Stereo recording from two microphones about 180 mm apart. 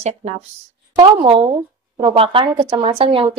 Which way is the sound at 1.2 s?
30° right (ahead or behind).